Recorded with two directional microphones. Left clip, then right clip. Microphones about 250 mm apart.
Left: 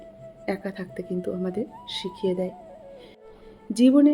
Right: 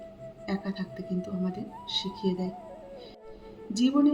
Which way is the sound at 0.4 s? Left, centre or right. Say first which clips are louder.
Left 5 dB; left.